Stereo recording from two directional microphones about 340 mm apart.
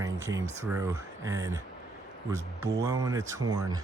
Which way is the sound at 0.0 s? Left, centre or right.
Centre.